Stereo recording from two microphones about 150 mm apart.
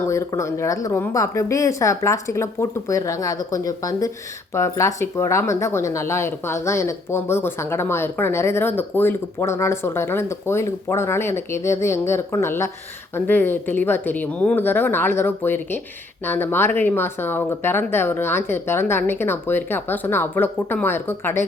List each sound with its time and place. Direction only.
0.1 s speech: 20° left (ahead or behind)